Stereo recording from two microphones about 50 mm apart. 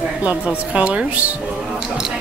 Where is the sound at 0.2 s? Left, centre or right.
Right.